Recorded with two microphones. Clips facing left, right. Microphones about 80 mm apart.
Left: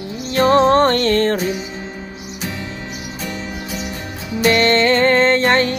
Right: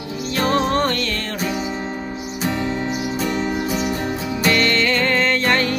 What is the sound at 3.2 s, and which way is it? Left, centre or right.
Music, right.